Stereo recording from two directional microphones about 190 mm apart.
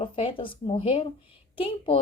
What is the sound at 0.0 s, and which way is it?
A woman's voice, 30° left (ahead or behind).